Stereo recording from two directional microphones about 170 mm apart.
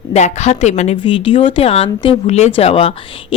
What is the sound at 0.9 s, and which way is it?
A woman's voice, 30° left (ahead or behind).